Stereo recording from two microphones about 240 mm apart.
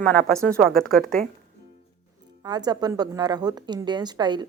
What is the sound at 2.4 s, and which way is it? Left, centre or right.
Speech, centre.